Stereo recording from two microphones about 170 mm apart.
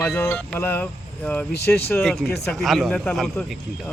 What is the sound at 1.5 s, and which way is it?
Speech, 70° left (ahead or behind).